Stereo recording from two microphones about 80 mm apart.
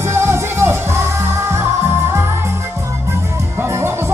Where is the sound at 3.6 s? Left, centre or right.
Right.